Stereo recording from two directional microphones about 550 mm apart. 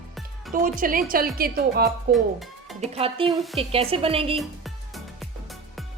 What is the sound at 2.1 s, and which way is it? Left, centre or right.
A woman's voice, centre.